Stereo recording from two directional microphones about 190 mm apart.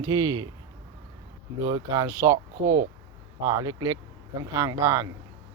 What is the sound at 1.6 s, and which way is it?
Speech, 20° right (ahead or behind).